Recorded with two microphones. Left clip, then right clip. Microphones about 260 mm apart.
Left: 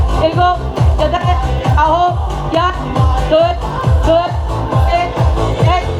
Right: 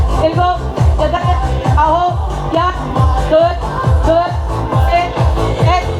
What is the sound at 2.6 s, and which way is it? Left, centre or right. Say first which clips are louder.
Music: even; left.